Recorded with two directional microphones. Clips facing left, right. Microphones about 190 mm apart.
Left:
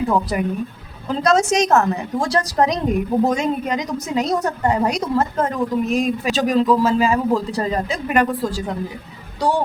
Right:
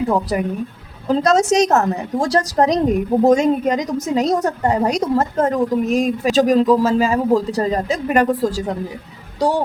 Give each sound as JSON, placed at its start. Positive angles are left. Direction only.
{"t": 0.1, "sound": "a woman's voice", "side_deg": -35}